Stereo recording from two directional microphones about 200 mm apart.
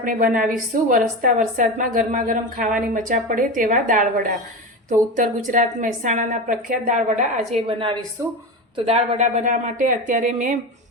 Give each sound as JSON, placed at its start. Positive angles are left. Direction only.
{"t": 0.0, "sound": "a woman's voice", "side_deg": -45}